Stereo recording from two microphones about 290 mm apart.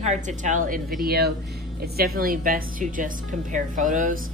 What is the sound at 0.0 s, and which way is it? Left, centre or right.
A woman's voice, right.